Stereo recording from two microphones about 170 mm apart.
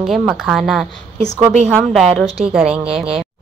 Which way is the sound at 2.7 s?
35° right (ahead or behind).